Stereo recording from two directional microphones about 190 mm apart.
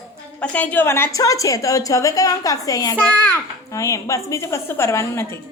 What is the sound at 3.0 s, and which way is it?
Speech, 10° left (ahead or behind).